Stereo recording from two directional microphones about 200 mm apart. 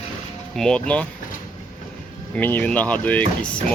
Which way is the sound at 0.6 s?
5° left (ahead or behind).